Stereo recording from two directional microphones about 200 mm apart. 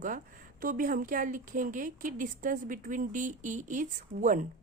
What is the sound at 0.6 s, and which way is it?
Speech, 45° right (ahead or behind).